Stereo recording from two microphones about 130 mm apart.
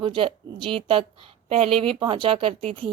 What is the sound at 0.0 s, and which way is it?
A woman's voice, 40° right (ahead or behind).